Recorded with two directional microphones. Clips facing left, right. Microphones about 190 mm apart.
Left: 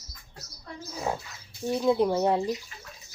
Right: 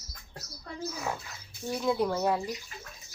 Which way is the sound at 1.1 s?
30° left (ahead or behind).